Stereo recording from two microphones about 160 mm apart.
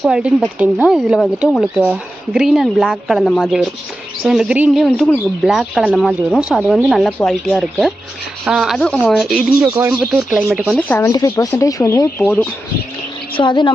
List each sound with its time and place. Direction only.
0.0 s speech: 5° right (ahead or behind)
9.6 s speech: 20° right (ahead or behind)
10.0 s speech: centre (ahead or behind)
10.8 s speech: 10° left (ahead or behind)
13.3 s speech: 30° left (ahead or behind)